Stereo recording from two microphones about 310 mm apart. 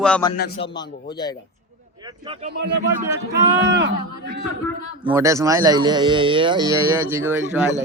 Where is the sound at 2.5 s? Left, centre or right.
Right.